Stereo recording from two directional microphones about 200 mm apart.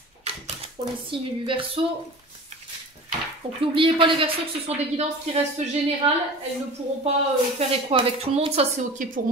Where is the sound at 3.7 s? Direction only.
25° right (ahead or behind).